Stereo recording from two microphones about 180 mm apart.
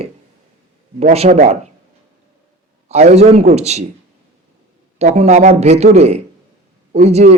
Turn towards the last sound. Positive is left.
turn(degrees=-35)  # may be behind; listen again after turning